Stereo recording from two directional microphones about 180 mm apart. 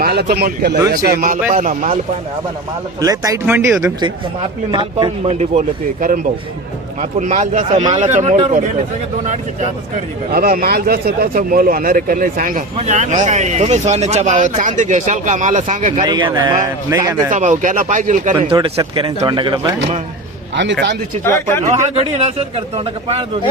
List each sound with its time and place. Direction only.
0.0 s a man's voice: 60° right (ahead or behind)
3.0 s speech: 20° right (ahead or behind)
4.7 s a man's voice: 25° right (ahead or behind); by 9.6 s 40° right (ahead or behind)
10.3 s speech: 55° right (ahead or behind)
12.7 s speech: 40° right (ahead or behind)
16.0 s speech: 25° right (ahead or behind)
17.3 s speech: 45° right (ahead or behind)
18.5 s speech: 25° right (ahead or behind)
21.2 s a man's voice: 15° left (ahead or behind)
21.7 s a man's voice: 35° right (ahead or behind)